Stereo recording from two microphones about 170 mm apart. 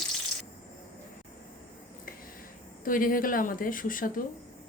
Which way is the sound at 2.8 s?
55° left (ahead or behind).